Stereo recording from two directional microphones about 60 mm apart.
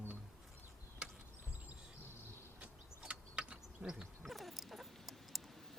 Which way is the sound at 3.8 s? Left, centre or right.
Right.